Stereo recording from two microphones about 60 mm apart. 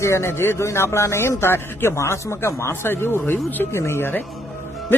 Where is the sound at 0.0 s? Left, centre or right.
Left.